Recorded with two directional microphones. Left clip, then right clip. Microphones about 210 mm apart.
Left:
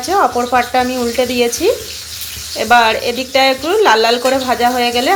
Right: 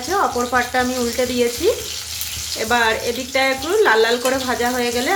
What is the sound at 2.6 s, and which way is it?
Speech, 15° left (ahead or behind).